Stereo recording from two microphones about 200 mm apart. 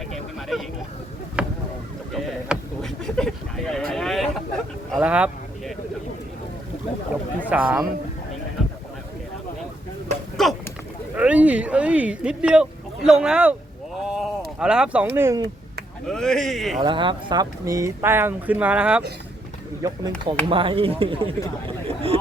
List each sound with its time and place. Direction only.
0.1 s vehicle: centre (ahead or behind)
1.4 s boat: 5° right (ahead or behind)
2.1 s a sound: centre (ahead or behind)
7.5 s speech: 5° right (ahead or behind)
10.4 s a sound: centre (ahead or behind)
16.0 s speech: 5° left (ahead or behind)
16.8 s speech: 25° right (ahead or behind); by 19.0 s 5° right (ahead or behind)
19.8 s speech: 20° right (ahead or behind)